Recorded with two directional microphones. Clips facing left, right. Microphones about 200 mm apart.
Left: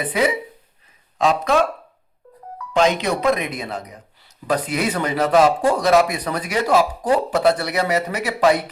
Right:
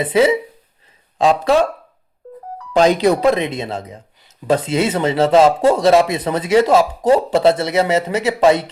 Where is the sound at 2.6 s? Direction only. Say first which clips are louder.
Right 5 dB; 35° right (ahead or behind).